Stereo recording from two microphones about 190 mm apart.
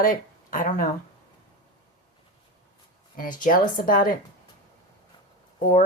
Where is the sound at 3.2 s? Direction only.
45° left (ahead or behind).